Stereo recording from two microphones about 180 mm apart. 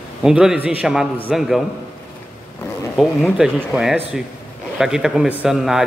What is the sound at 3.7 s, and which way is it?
A man's voice, 5° right (ahead or behind).